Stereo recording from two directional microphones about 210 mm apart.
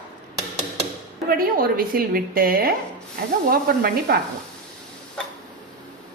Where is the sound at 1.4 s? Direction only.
45° right (ahead or behind).